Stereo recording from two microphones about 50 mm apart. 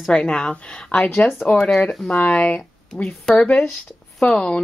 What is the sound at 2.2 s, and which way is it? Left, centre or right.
A woman's voice, left.